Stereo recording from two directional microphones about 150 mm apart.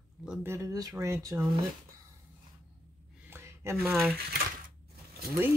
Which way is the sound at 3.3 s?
15° right (ahead or behind).